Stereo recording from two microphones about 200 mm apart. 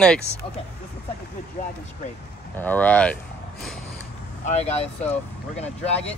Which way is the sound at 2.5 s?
10° left (ahead or behind).